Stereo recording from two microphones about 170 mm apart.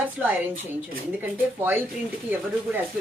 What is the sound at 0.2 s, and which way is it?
Speech, 10° right (ahead or behind).